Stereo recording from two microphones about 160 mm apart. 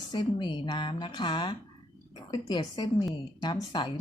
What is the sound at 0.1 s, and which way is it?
A woman's voice, 30° left (ahead or behind).